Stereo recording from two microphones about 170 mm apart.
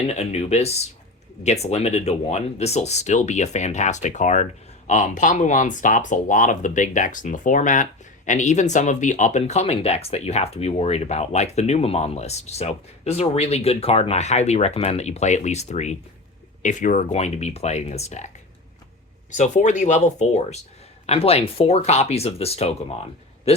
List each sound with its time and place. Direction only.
0.1 s speech: 40° left (ahead or behind)
19.3 s speech: 45° left (ahead or behind)